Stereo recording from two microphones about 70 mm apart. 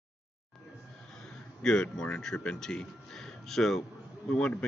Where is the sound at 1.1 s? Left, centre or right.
Centre.